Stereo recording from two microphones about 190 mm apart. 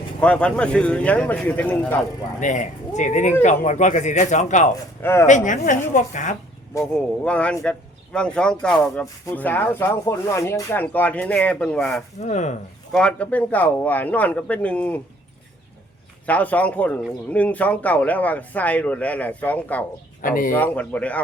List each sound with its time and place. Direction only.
0.2 s speech: 5° left (ahead or behind)
2.4 s a man's voice: 40° left (ahead or behind)
6.9 s speech: 5° left (ahead or behind)
12.2 s a man's voice: 40° left (ahead or behind)
12.9 s speech: 5° left (ahead or behind)
16.2 s speech: 10° left (ahead or behind)
20.2 s speech: 45° left (ahead or behind)
20.5 s speech: 10° left (ahead or behind)